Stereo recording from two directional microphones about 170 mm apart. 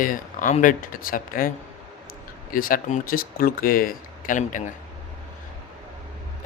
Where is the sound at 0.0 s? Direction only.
50° left (ahead or behind).